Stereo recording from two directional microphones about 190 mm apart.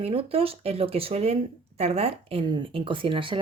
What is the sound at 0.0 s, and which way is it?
Speech, 30° right (ahead or behind).